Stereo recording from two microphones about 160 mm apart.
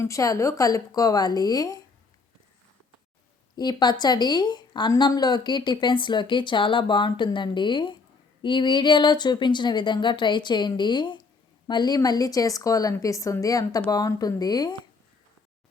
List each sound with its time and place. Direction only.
0.0 s a woman's voice: 20° left (ahead or behind)
3.5 s a woman's voice: 25° left (ahead or behind)